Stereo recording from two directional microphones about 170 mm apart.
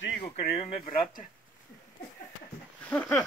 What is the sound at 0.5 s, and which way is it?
Speech, 40° left (ahead or behind).